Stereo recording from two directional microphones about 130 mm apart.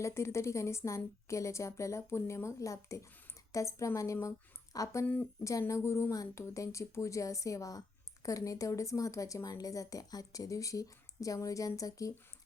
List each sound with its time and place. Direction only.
0.0 s a woman's voice: 20° left (ahead or behind)